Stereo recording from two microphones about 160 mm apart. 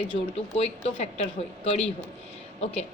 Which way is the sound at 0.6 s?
40° left (ahead or behind).